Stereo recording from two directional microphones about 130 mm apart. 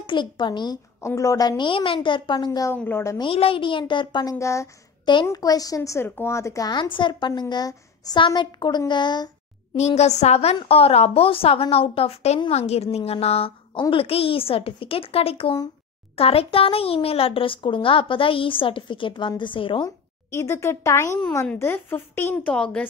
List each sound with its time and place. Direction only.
0.0 s a woman's voice: 40° left (ahead or behind)
1.0 s speech: 25° left (ahead or behind)
1.6 s a woman's voice: 40° left (ahead or behind)
2.7 s speech: 15° left (ahead or behind)
3.2 s a woman's voice: 45° left (ahead or behind)
9.8 s a child's voice: 60° left (ahead or behind); by 19.9 s 40° left (ahead or behind)
20.2 s speech: 20° left (ahead or behind)